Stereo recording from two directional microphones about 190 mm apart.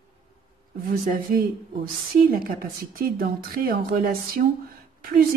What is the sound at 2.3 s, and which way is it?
A woman's voice, 50° right (ahead or behind).